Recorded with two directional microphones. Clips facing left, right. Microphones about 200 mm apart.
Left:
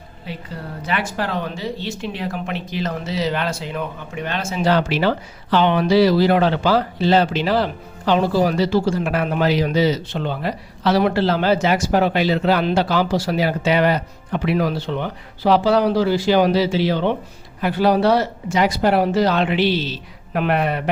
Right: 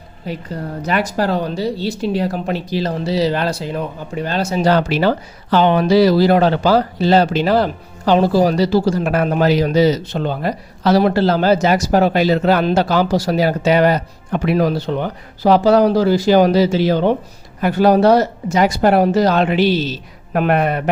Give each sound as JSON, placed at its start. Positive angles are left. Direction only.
{"t": 0.3, "sound": "speech", "side_deg": -40}